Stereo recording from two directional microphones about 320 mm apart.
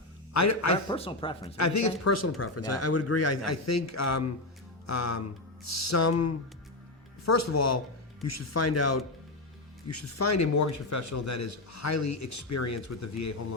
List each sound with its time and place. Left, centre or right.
0.3 s speech: left
0.9 s speech: centre
1.5 s a man's voice: left